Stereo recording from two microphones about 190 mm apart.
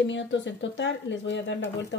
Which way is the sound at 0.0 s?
70° left (ahead or behind).